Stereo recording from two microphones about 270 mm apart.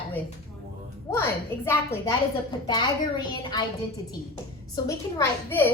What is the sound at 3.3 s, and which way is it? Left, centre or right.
A woman's voice, centre.